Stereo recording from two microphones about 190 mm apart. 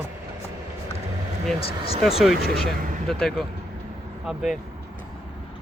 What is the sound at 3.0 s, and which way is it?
Speech, centre (ahead or behind).